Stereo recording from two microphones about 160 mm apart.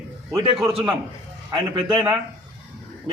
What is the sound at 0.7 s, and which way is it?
A man's voice, 35° right (ahead or behind).